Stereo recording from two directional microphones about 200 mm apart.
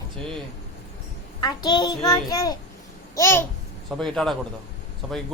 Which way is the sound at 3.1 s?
15° left (ahead or behind).